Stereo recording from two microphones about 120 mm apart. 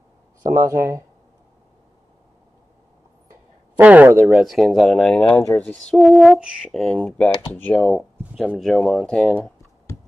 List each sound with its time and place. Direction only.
0.4 s speech: 25° right (ahead or behind)
3.7 s speech: 15° right (ahead or behind)
4.3 s speech: centre (ahead or behind)
5.4 s speech: 15° left (ahead or behind)